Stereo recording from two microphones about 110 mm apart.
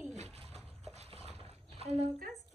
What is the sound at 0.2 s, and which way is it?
Pigeon, 65° right (ahead or behind).